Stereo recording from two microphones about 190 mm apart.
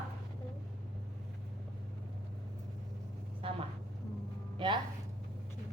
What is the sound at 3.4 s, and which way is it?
Vehicle, 30° right (ahead or behind).